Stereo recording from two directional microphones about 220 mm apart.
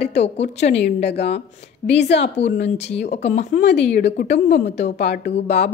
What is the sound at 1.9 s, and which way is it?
Speech, 50° left (ahead or behind).